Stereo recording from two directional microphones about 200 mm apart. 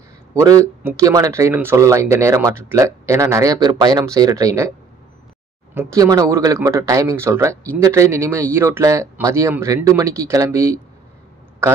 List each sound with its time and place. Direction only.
0.3 s speech: 15° right (ahead or behind)
5.8 s speech: 15° right (ahead or behind)